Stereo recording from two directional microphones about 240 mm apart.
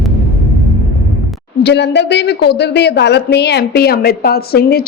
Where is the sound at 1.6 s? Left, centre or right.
Left.